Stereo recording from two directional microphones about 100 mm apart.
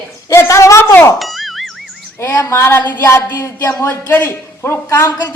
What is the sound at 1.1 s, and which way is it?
Music, centre (ahead or behind).